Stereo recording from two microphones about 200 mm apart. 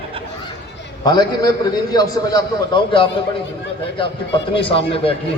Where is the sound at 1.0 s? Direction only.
20° left (ahead or behind).